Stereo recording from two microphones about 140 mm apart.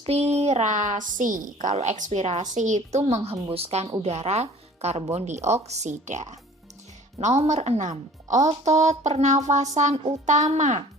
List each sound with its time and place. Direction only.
0.0 s a woman's voice: 45° right (ahead or behind)